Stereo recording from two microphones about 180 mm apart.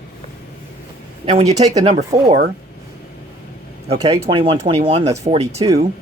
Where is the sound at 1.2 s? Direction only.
30° right (ahead or behind).